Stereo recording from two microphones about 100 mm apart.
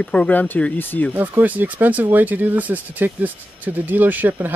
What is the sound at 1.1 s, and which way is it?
Speech, 20° right (ahead or behind).